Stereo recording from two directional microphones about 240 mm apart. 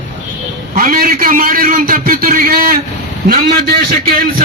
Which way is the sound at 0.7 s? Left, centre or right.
Right.